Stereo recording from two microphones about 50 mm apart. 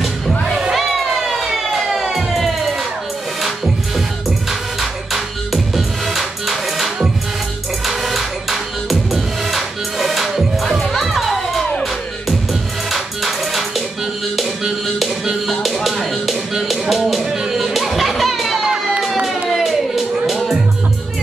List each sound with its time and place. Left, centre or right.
0.5 s a sound: centre
4.5 s music: centre
12.9 s music: centre
16.9 s a sound: centre
17.4 s music: centre
18.9 s crowd: centre
19.5 s music: centre